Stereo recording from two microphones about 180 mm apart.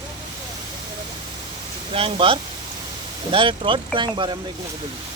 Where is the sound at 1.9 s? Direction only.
30° right (ahead or behind).